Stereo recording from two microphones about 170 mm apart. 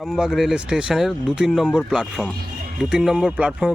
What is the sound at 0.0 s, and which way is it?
Speech, centre (ahead or behind).